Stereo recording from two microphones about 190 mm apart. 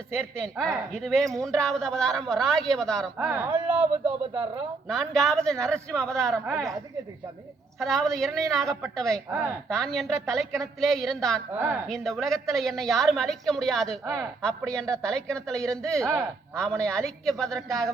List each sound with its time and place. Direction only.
0.1 s a woman's voice: centre (ahead or behind)
3.2 s a woman's voice: 10° right (ahead or behind)
7.8 s a woman's voice: centre (ahead or behind)
11.5 s speech: 10° right (ahead or behind)
11.9 s a woman's voice: centre (ahead or behind)
14.0 s speech: 15° right (ahead or behind)
14.4 s a woman's voice: 5° left (ahead or behind)